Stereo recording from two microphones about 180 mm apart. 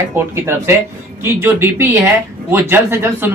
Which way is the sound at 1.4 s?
10° right (ahead or behind).